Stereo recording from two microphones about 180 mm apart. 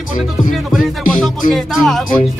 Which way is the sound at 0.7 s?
Centre (ahead or behind).